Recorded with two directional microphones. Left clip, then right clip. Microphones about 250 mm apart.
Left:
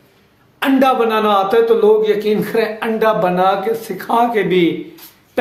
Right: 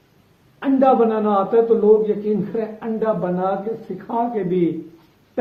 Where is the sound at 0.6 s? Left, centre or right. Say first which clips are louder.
Left 2 dB; centre.